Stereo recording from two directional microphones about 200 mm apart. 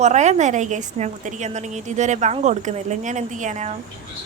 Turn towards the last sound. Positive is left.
turn(degrees=-35)  # may be behind; listen again after turning